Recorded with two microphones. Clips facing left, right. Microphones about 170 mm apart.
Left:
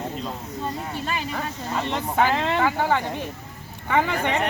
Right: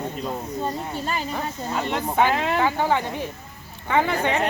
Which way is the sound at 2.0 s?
15° right (ahead or behind).